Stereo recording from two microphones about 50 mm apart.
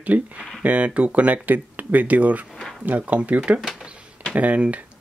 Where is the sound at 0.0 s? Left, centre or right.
Right.